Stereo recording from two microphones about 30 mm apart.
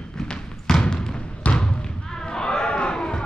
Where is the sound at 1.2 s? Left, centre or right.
Left.